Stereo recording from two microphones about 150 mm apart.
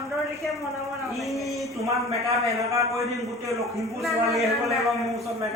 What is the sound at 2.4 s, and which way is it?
Speech, 20° right (ahead or behind).